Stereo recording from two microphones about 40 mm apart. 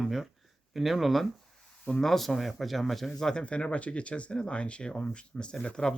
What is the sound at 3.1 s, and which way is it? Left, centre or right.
Speech, centre.